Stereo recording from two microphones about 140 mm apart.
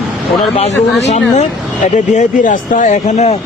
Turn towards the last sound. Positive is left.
turn(degrees=55)  # may be behind; listen again after turning